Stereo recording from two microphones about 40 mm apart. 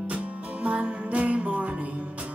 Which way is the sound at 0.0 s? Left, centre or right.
Right.